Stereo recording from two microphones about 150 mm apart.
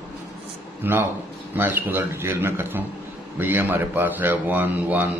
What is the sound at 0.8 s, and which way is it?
Speech, 15° right (ahead or behind).